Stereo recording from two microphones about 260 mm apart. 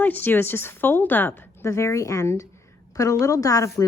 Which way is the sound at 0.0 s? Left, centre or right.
Centre.